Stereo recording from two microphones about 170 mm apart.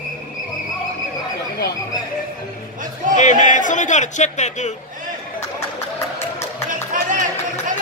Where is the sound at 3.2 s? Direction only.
45° left (ahead or behind).